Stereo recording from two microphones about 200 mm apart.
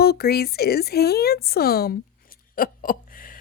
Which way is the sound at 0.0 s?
50° left (ahead or behind).